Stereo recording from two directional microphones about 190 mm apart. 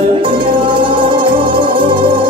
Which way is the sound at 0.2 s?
25° right (ahead or behind).